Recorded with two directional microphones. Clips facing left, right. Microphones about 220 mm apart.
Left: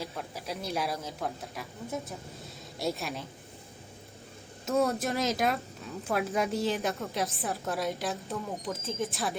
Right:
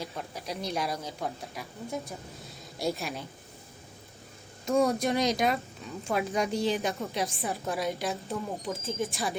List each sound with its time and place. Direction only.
0.0 s a woman's voice: centre (ahead or behind)
4.8 s a woman's voice: centre (ahead or behind)